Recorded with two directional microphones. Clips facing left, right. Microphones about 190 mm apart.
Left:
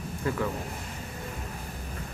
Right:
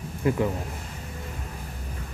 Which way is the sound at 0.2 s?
15° right (ahead or behind).